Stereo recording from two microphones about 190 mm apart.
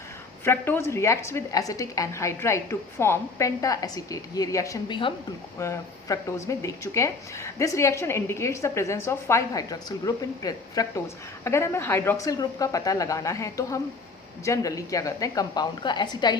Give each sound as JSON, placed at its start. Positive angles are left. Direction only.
{"t": 0.4, "sound": "speech", "side_deg": 10}